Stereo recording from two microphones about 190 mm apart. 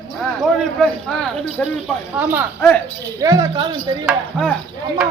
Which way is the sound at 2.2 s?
10° right (ahead or behind).